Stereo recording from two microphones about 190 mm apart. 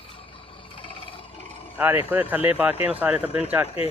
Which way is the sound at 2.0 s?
10° right (ahead or behind).